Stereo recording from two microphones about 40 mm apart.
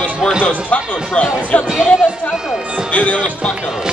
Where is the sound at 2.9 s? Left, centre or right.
Left.